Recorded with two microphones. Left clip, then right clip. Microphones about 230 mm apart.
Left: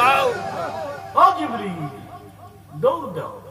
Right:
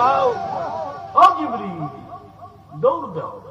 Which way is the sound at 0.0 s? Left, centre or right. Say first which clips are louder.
Even; left.